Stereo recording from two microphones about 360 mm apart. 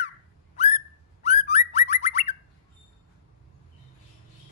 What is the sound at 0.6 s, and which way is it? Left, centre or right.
Bird, centre.